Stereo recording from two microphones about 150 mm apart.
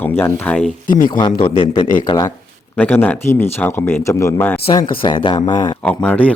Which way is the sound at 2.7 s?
10° left (ahead or behind).